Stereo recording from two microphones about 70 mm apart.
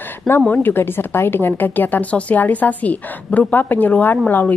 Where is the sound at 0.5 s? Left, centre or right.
Left.